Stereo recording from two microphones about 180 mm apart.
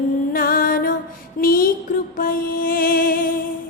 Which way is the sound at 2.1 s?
50° left (ahead or behind).